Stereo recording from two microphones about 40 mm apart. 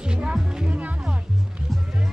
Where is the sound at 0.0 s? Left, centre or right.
Right.